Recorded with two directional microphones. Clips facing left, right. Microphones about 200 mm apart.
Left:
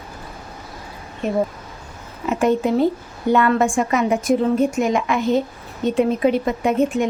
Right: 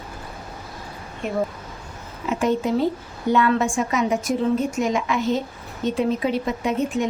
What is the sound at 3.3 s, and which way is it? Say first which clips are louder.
A woman's voice: left 3 dB; 55° left (ahead or behind).